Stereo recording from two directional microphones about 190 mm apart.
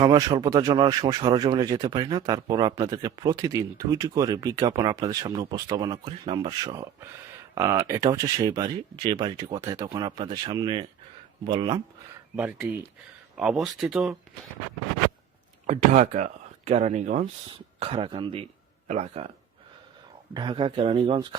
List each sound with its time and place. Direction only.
0.0 s speech: 20° right (ahead or behind)
7.5 s speech: 15° right (ahead or behind)
12.4 s speech: 10° right (ahead or behind)
15.6 s speech: 40° right (ahead or behind)
17.5 s speech: 30° right (ahead or behind)
20.3 s speech: 25° right (ahead or behind)